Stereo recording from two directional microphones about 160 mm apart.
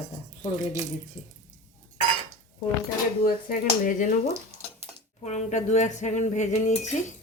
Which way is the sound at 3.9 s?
55° left (ahead or behind).